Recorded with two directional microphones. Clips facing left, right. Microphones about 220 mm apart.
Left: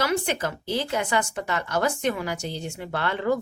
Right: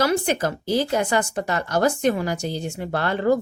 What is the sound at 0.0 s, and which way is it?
Speech, 40° right (ahead or behind).